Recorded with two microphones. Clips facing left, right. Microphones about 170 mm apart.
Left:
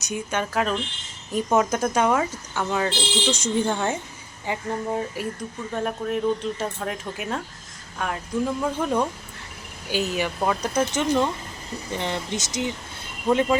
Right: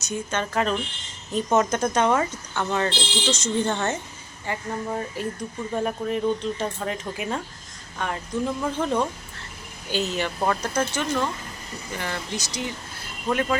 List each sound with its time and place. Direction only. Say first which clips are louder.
0.0 s speech: left 1 dB; 15° left (ahead or behind)
5.7 s speech: even; centre (ahead or behind); by 13.6 s 15° left (ahead or behind)